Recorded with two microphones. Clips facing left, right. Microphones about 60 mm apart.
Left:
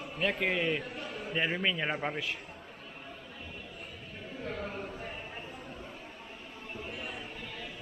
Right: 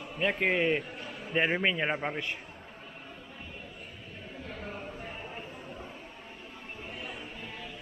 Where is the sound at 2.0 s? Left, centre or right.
Centre.